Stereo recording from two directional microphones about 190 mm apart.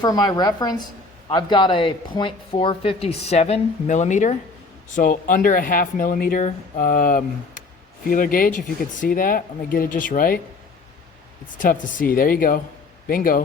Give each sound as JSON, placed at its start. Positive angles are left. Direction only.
{"t": 0.0, "sound": "speech", "side_deg": 20}
{"t": 11.5, "sound": "speech", "side_deg": 45}